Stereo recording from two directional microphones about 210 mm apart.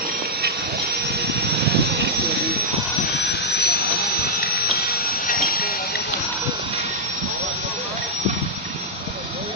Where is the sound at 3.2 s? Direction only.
50° left (ahead or behind).